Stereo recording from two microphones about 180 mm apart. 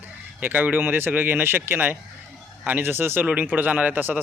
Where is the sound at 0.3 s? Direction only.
10° right (ahead or behind).